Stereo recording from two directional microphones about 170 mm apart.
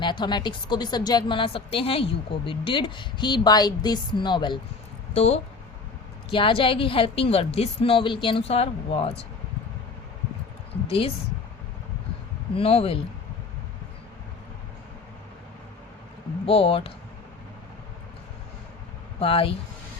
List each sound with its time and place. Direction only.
0.0 s a woman's voice: 25° left (ahead or behind)
10.8 s a woman's voice: 35° left (ahead or behind)
12.5 s a woman's voice: 35° left (ahead or behind)
16.5 s a woman's voice: 35° left (ahead or behind)
19.2 s a woman's voice: 30° left (ahead or behind)